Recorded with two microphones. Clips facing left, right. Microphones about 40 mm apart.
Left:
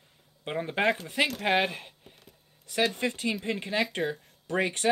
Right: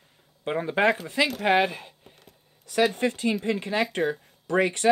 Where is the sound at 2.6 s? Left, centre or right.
Right.